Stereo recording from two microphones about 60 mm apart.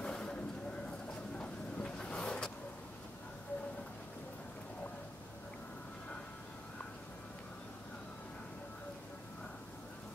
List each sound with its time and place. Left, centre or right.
0.0 s vehicle: centre